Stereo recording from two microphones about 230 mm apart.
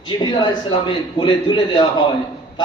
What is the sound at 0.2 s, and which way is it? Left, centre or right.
A man's voice, centre.